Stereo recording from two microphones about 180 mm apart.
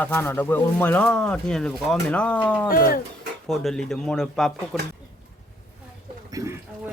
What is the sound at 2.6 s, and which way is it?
Speech, 55° left (ahead or behind).